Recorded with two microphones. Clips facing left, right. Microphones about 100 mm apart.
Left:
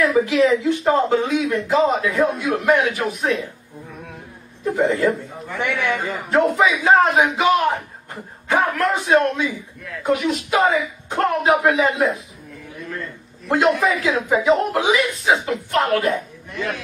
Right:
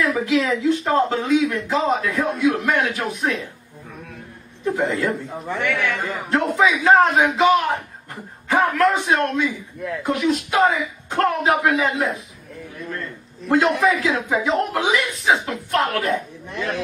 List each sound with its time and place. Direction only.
0.0 s a man's voice: centre (ahead or behind)
4.6 s a man's voice: centre (ahead or behind)
13.5 s a man's voice: centre (ahead or behind)